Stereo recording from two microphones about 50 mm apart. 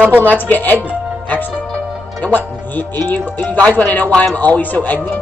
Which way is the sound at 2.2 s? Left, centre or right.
Left.